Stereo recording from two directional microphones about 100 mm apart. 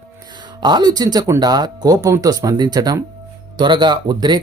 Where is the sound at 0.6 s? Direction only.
45° right (ahead or behind).